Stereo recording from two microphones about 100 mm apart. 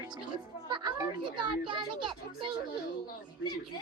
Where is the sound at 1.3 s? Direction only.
55° right (ahead or behind).